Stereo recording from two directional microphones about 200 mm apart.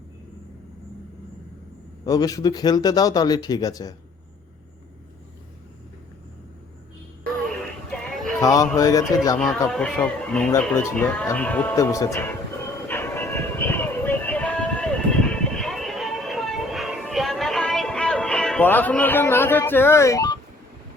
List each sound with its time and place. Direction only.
2.0 s speech: 20° left (ahead or behind)
8.4 s speech: 15° left (ahead or behind)
9.6 s speech: 5° left (ahead or behind)
12.9 s music: 10° left (ahead or behind)